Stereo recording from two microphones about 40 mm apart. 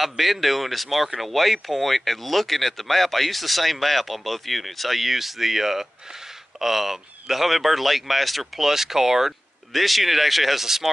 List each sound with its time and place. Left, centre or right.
0.0 s speech: centre